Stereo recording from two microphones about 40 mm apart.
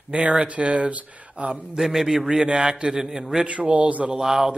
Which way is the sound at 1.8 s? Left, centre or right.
Centre.